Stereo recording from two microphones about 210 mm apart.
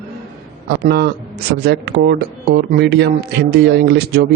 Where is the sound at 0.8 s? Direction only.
50° right (ahead or behind).